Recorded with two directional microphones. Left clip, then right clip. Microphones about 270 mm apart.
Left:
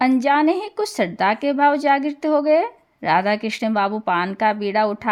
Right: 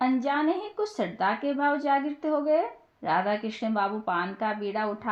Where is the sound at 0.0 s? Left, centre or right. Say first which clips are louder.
Left 9 dB; left.